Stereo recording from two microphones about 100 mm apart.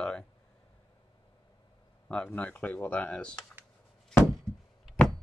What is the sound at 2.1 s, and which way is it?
Speech, 10° left (ahead or behind).